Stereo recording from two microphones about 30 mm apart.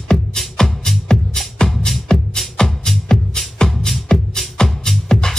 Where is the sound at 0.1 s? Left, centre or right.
Left.